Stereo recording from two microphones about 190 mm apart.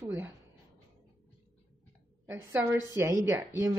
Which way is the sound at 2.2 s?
15° right (ahead or behind).